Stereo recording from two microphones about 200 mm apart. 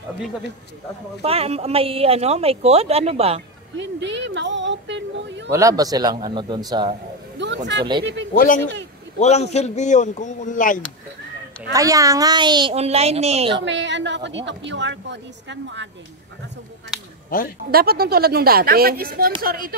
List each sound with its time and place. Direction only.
1.2 s speech: 30° right (ahead or behind)
3.7 s a woman's voice: 65° right (ahead or behind)
5.5 s speech: 15° right (ahead or behind)
7.3 s a woman's voice: 60° right (ahead or behind)
9.2 s speech: 35° left (ahead or behind)
11.7 s speech: 15° right (ahead or behind)
13.7 s a woman's voice: 65° right (ahead or behind)
17.6 s speech: 50° right (ahead or behind)